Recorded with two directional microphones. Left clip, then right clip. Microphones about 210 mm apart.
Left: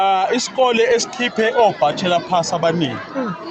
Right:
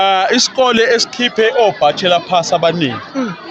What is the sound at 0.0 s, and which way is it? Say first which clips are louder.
Speech: right 4 dB; 45° right (ahead or behind).